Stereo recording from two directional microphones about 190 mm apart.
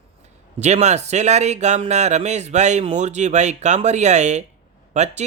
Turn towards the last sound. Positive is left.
turn(degrees=-35)  # may be behind; listen again after turning